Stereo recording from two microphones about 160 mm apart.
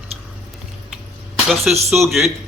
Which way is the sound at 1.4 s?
Centre (ahead or behind).